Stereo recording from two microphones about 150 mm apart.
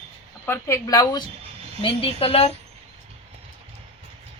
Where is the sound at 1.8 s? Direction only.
40° left (ahead or behind).